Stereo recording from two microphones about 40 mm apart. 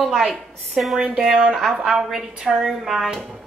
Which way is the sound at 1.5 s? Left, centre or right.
Centre.